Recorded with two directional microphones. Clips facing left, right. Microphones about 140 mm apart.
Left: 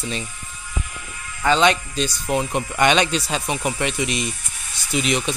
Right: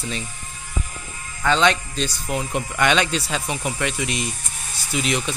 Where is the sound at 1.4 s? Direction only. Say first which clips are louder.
Left 1 dB; 15° left (ahead or behind).